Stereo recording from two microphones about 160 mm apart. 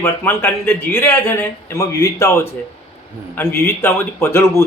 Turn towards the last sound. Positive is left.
turn(degrees=15)  # may be behind; listen again after turning